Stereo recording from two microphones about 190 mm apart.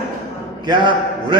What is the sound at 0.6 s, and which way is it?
Speech, 25° right (ahead or behind).